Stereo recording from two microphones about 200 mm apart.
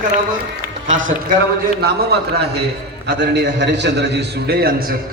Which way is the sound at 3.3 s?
60° right (ahead or behind).